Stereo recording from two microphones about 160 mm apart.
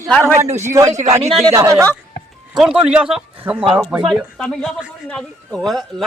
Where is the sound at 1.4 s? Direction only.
20° right (ahead or behind).